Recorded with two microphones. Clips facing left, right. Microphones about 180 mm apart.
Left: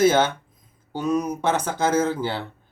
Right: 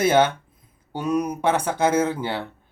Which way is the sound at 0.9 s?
10° right (ahead or behind).